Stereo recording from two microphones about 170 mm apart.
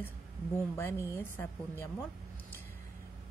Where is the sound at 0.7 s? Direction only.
15° left (ahead or behind).